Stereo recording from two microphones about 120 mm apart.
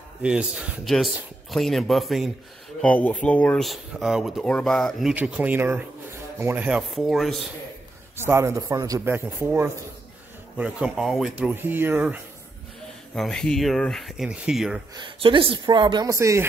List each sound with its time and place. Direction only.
0.2 s speech: 5° right (ahead or behind)
2.8 s speech: 10° left (ahead or behind)
3.6 s speech: centre (ahead or behind)
5.1 s speech: 10° right (ahead or behind)
7.0 s speech: centre (ahead or behind)
8.3 s a man's voice: 25° right (ahead or behind)
9.0 s speech: 15° right (ahead or behind)
10.6 s speech: 5° right (ahead or behind)
11.3 s speech: 15° right (ahead or behind)
13.1 s speech: 5° left (ahead or behind)
15.0 s a woman's voice: 45° right (ahead or behind)
16.1 s a man's voice: 25° right (ahead or behind)